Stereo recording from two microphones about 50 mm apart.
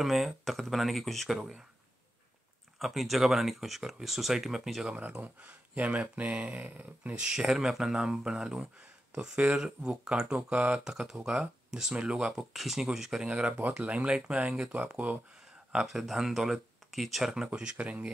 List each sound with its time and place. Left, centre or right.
0.0 s speech: centre
2.8 s speech: centre
5.2 s speech: right
7.2 s speech: centre
8.7 s speech: right
10.8 s speech: centre
11.7 s speech: centre
12.3 s speech: centre
13.5 s speech: right
13.7 s speech: right
15.7 s speech: centre
17.5 s speech: right